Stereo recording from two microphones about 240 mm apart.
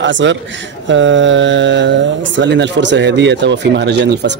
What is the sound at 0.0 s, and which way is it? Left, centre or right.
Speech, right.